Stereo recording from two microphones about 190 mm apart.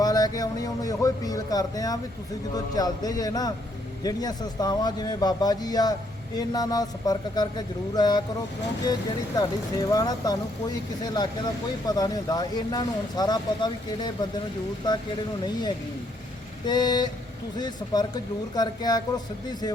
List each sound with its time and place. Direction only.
0.0 s speech: 20° left (ahead or behind)
9.4 s speech: 20° left (ahead or behind)
16.6 s speech: 20° left (ahead or behind)